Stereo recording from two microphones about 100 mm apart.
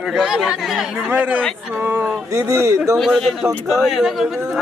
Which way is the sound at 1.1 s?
15° right (ahead or behind).